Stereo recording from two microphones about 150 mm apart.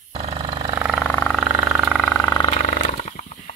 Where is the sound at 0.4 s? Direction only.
30° right (ahead or behind).